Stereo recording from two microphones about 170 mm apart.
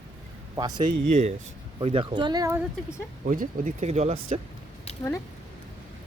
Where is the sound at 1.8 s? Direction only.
30° right (ahead or behind).